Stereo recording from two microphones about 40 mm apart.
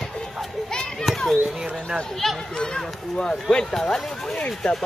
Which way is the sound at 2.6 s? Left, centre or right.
Centre.